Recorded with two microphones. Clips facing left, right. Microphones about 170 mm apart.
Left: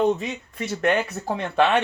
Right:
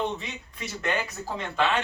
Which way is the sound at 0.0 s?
40° left (ahead or behind).